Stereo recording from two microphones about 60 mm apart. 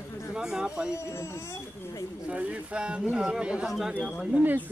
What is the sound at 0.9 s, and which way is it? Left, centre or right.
Speech, left.